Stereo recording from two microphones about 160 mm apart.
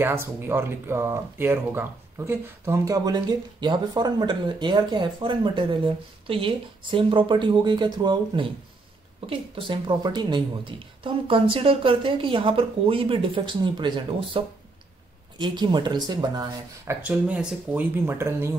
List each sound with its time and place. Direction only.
0.0 s speech: 15° right (ahead or behind)
16.8 s speech: 10° right (ahead or behind)